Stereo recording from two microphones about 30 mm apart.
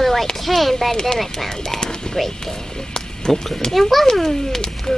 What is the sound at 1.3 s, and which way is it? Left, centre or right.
Speech, centre.